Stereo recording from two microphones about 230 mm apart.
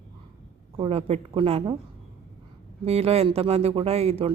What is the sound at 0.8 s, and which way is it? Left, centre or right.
Speech, right.